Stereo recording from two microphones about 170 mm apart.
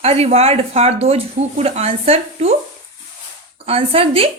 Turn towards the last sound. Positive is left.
turn(degrees=-35)  # may be behind; listen again after turning